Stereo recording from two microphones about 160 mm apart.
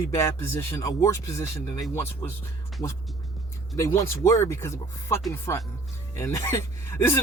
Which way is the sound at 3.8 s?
15° left (ahead or behind).